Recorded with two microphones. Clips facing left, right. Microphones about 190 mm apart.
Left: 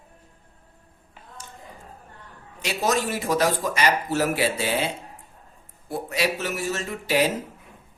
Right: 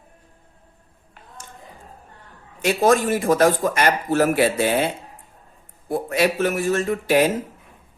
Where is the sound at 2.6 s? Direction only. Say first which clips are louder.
Right 7 dB; 50° right (ahead or behind).